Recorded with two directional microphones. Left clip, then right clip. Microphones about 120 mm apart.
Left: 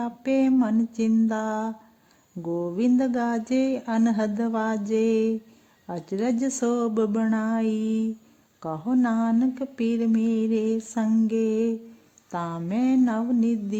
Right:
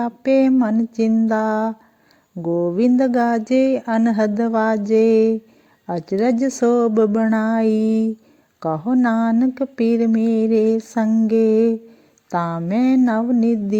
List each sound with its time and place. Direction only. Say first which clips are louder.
0.0 s speech: right 8 dB; 30° right (ahead or behind)
2.4 s a sound: right 8 dB; 25° right (ahead or behind)
4.1 s speech: right 8 dB; 25° right (ahead or behind)